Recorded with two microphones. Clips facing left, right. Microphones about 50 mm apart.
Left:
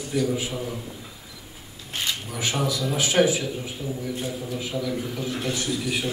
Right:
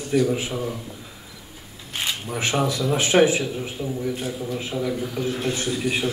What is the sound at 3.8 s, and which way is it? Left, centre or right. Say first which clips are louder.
Speech: right 3 dB; right.